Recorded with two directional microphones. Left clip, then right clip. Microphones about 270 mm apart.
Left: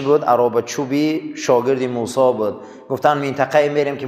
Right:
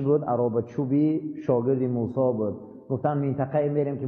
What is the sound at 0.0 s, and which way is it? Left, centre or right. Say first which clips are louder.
A man's voice: left 9 dB; centre.